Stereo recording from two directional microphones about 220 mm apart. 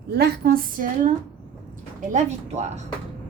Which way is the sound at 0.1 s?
45° right (ahead or behind).